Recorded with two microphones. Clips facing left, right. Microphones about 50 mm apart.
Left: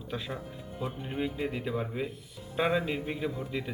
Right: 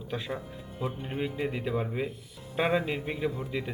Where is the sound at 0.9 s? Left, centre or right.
Centre.